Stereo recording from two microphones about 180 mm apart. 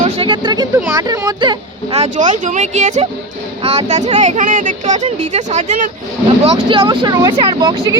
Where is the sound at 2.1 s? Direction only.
45° right (ahead or behind).